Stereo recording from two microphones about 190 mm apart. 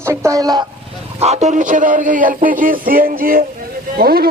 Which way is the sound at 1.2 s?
35° right (ahead or behind).